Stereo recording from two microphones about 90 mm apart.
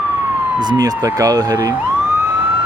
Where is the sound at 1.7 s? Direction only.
20° right (ahead or behind).